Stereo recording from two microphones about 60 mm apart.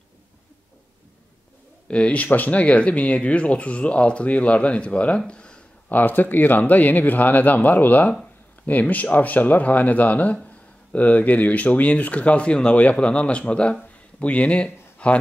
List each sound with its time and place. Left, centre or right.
1.9 s speech: centre
5.9 s speech: left